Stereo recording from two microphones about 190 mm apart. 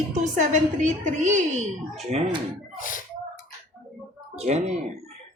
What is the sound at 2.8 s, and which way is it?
Speech, 45° left (ahead or behind).